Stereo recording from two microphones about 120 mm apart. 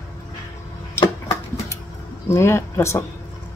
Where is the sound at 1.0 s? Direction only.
20° left (ahead or behind).